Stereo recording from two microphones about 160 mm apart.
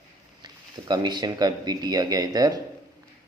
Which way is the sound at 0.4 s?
25° right (ahead or behind).